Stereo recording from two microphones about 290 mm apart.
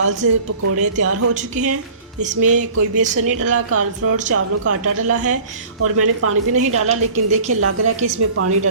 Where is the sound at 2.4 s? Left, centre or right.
Right.